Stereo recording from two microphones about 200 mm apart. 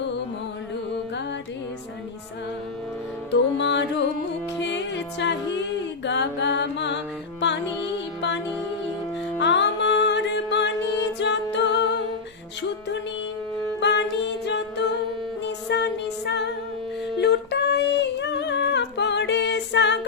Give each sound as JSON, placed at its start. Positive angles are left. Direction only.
{"t": 3.6, "sound": "music", "side_deg": 65}
{"t": 6.1, "sound": "mantra", "side_deg": 60}
{"t": 7.4, "sound": "music", "side_deg": 60}
{"t": 9.4, "sound": "music", "side_deg": 60}
{"t": 13.7, "sound": "music", "side_deg": 60}
{"t": 17.2, "sound": "humming", "side_deg": 55}